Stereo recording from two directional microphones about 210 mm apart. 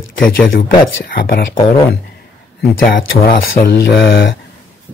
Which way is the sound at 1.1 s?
45° left (ahead or behind).